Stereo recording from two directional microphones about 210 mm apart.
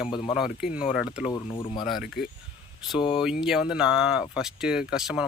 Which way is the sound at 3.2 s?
5° right (ahead or behind).